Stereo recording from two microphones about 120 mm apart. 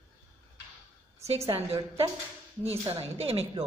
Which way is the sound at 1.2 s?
60° right (ahead or behind).